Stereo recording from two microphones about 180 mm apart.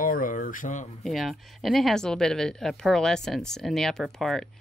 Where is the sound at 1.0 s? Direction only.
Centre (ahead or behind).